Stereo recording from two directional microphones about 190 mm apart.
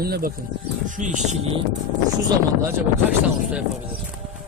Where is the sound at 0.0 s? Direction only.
55° right (ahead or behind).